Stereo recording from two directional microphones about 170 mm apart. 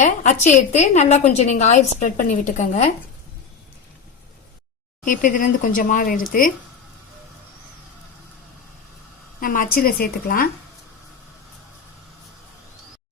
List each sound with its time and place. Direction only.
0.0 s a woman's voice: 45° left (ahead or behind)
5.0 s a woman's voice: 50° left (ahead or behind)
9.4 s a woman's voice: 55° left (ahead or behind)